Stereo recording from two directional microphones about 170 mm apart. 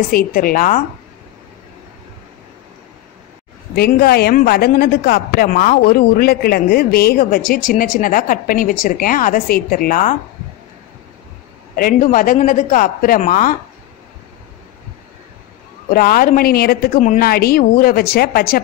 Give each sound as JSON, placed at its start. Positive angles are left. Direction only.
{"t": 0.1, "sound": "a woman's voice", "side_deg": 55}
{"t": 3.7, "sound": "a woman's voice", "side_deg": 65}
{"t": 11.7, "sound": "a man's voice", "side_deg": 55}
{"t": 15.9, "sound": "a woman's voice", "side_deg": 60}